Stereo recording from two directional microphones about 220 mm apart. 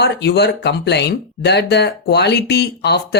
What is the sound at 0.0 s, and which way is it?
Speech, 50° left (ahead or behind).